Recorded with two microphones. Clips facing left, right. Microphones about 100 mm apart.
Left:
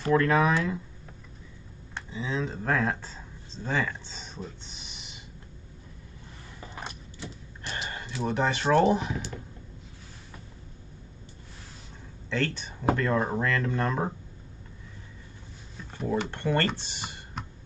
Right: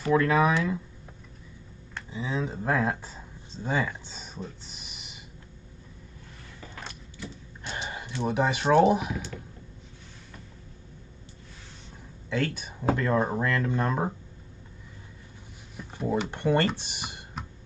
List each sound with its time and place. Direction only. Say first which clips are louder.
0.0 s speech: even; 5° right (ahead or behind)
2.0 s speech: even; 5° right (ahead or behind)
4.4 s a sound: right 1 dB; 5° right (ahead or behind)
6.6 s vehicle: left 3 dB; 25° left (ahead or behind)
7.6 s a sound: even; centre (ahead or behind)
8.3 s speech: right 1 dB; 10° right (ahead or behind)
12.3 s speech: right 1 dB; 10° right (ahead or behind)
16.0 s speech: right 1 dB; 5° right (ahead or behind)